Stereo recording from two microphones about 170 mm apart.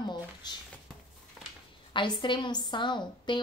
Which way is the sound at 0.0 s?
25° left (ahead or behind).